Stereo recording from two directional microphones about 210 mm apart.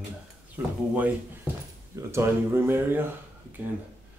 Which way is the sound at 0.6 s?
10° right (ahead or behind).